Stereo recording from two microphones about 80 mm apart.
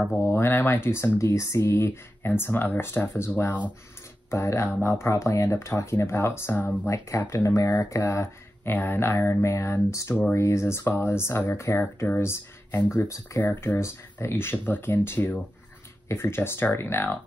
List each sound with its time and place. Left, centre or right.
0.2 s speech: left
4.3 s speech: left
6.9 s speech: left